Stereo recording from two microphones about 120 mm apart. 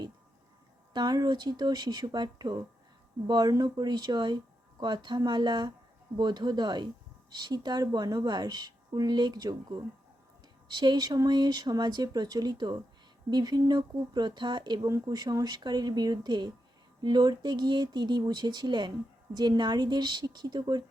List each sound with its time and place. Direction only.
0.9 s a woman's voice: 35° right (ahead or behind)